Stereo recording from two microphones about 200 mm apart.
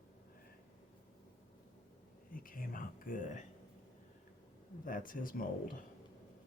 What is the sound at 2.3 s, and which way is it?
Speech, 45° left (ahead or behind).